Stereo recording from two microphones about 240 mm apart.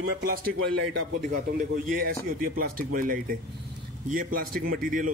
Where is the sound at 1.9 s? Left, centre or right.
Right.